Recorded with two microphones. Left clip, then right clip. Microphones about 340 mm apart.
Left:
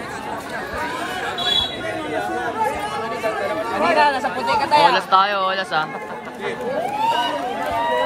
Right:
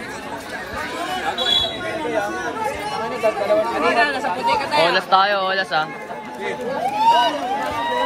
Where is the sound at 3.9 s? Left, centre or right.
Centre.